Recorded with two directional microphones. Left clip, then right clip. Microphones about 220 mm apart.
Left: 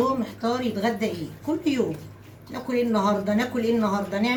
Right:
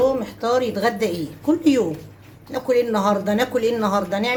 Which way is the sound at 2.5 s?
45° right (ahead or behind).